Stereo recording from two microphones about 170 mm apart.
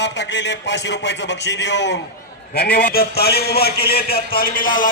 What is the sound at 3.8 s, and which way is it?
A man's voice, 65° left (ahead or behind).